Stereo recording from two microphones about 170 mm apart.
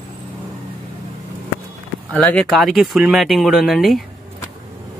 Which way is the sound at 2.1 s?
5° left (ahead or behind).